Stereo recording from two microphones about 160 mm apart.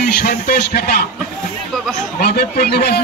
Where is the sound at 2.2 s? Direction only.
80° left.